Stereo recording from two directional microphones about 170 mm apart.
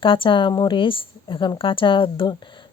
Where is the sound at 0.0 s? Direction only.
30° left (ahead or behind).